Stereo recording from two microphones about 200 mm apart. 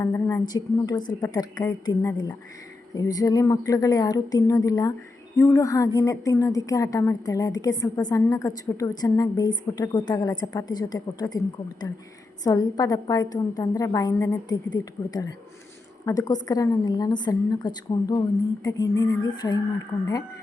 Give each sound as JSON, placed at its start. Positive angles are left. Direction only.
{"t": 0.0, "sound": "a woman's voice", "side_deg": 15}